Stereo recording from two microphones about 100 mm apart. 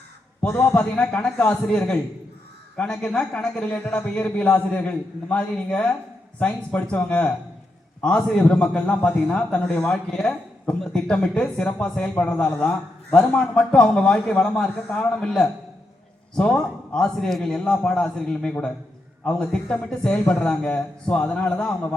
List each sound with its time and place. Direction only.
0.7 s a man's voice: 15° left (ahead or behind)